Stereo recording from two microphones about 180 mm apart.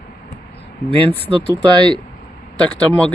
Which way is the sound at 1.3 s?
25° right (ahead or behind).